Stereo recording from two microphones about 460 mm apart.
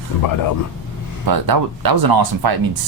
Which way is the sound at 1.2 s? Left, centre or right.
Right.